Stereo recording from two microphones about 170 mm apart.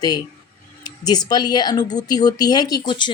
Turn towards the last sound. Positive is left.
turn(degrees=25)  # may be behind; listen again after turning